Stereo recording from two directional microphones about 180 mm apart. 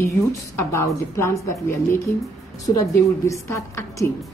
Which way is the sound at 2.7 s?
15° left (ahead or behind).